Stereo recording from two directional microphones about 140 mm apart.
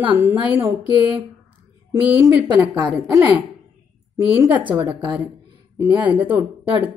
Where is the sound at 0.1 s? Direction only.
10° right (ahead or behind).